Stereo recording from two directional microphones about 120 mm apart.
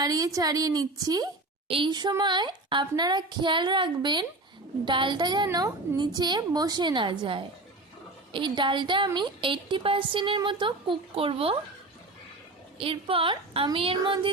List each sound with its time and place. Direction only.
0.0 s a woman's voice: 30° right (ahead or behind)
1.6 s a woman's voice: 50° right (ahead or behind)
1.9 s a woman's voice: 35° right (ahead or behind)
12.8 s speech: 50° right (ahead or behind)